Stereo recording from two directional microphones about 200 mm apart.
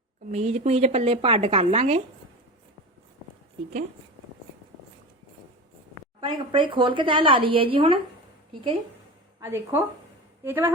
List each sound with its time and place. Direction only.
0.3 s a woman's voice: 35° right (ahead or behind)
6.1 s speech: 25° right (ahead or behind)
9.4 s a woman's voice: 10° right (ahead or behind)